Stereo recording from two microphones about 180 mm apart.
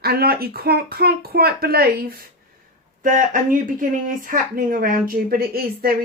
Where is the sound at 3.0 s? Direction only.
45° right (ahead or behind).